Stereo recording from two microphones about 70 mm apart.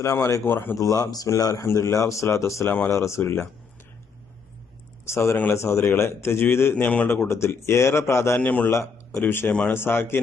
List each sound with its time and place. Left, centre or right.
0.0 s speech: left
0.4 s speech: left
0.8 s speech: left
1.6 s speech: left
2.6 s a man's voice: left
2.9 s speech: left
5.0 s speech: left
6.7 s a man's voice: centre
7.3 s speech: left
8.4 s a man's voice: centre
8.7 s speech: left